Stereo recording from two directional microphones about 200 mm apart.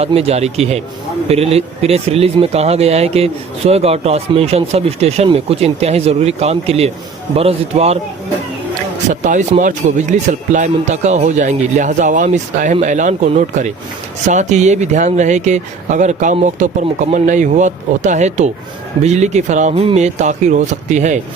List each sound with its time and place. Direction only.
0.0 s speech: 30° right (ahead or behind)
9.0 s speech: 40° right (ahead or behind)